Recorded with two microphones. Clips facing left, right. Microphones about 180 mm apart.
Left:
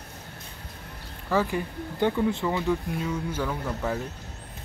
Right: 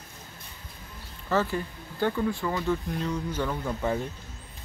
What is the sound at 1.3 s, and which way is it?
Speech, 15° left (ahead or behind).